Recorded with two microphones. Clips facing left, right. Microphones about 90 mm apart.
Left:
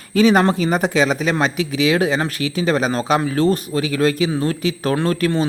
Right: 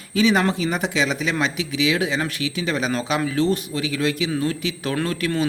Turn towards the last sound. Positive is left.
turn(degrees=40)  # may be behind; listen again after turning